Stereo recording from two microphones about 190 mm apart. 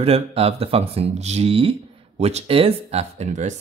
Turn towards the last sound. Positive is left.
turn(degrees=-35)  # may be behind; listen again after turning